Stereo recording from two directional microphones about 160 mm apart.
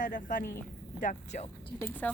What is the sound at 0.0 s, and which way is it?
A woman's voice, 55° left (ahead or behind).